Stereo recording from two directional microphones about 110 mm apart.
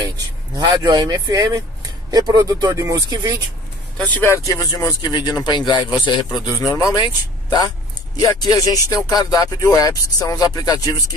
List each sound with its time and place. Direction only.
0.6 s speech: 35° right (ahead or behind)
4.0 s speech: 15° left (ahead or behind)
4.5 s a man's voice: 30° left (ahead or behind)
6.7 s speech: 30° left (ahead or behind)
8.3 s speech: 35° left (ahead or behind)